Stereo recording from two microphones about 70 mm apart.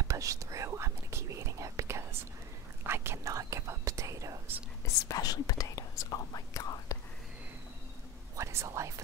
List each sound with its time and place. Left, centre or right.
0.1 s whispering: right
2.8 s speech: right
4.8 s speech: left
8.4 s speech: right